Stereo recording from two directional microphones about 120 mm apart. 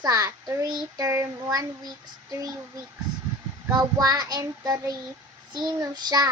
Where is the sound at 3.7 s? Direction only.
30° right (ahead or behind).